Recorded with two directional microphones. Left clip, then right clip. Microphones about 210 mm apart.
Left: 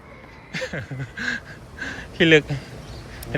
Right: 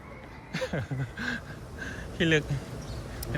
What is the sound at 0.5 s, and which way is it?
Speech, 10° right (ahead or behind).